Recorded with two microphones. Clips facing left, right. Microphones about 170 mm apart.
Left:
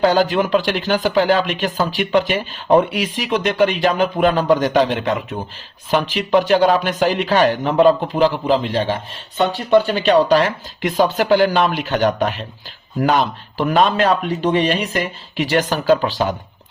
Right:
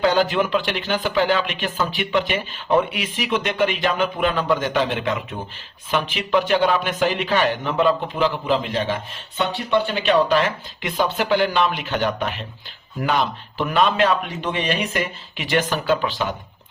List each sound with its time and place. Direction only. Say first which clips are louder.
0.0 s speech: left 3 dB; 40° left (ahead or behind)
13.6 s speech: left 3 dB; 40° left (ahead or behind)